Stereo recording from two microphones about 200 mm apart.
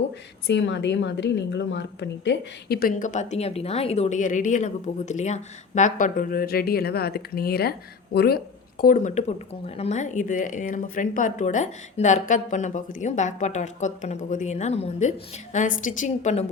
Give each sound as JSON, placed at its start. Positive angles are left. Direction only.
{"t": 0.4, "sound": "a woman's voice", "side_deg": 60}
{"t": 8.8, "sound": "speech", "side_deg": 40}